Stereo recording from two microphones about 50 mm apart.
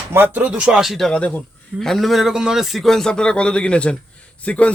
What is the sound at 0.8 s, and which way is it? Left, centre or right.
Speech, centre.